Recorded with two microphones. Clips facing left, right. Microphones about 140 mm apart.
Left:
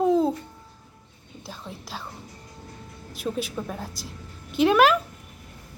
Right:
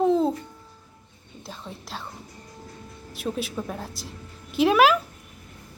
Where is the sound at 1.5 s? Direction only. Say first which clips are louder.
Even; centre (ahead or behind).